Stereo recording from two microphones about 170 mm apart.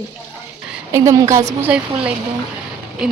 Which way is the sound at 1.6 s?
5° right (ahead or behind).